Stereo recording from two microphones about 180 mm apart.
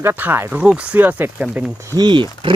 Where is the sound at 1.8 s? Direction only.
20° right (ahead or behind).